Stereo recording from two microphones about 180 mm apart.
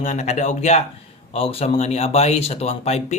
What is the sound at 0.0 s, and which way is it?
Speech, 40° left (ahead or behind).